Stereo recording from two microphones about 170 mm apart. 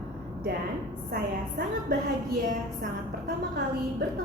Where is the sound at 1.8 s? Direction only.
55° right (ahead or behind).